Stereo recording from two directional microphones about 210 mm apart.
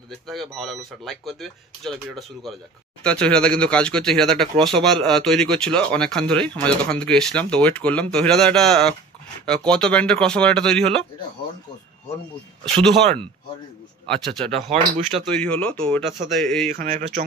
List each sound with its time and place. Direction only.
0.3 s speech: centre (ahead or behind)
14.1 s speech: 5° left (ahead or behind)
14.5 s speech: 30° right (ahead or behind)
15.2 s speech: 5° left (ahead or behind)
16.8 s a sound: 30° right (ahead or behind)